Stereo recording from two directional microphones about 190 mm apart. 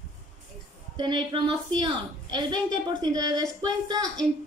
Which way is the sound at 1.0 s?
25° right (ahead or behind).